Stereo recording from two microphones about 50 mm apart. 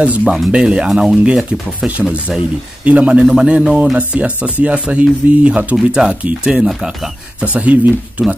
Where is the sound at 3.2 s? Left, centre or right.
Centre.